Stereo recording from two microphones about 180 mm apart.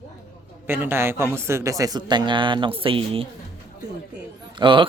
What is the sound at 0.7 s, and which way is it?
Speech, 10° right (ahead or behind).